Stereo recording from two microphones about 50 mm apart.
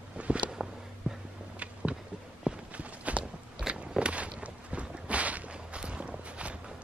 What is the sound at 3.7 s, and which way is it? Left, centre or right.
Biting, centre.